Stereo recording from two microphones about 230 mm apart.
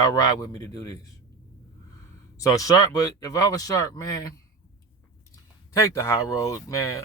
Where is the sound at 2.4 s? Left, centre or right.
Centre.